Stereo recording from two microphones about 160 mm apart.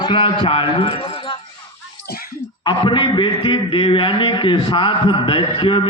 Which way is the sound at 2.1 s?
70° left (ahead or behind).